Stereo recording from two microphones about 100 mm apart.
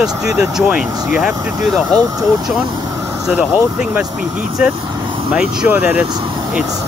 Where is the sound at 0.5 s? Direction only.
5° right (ahead or behind).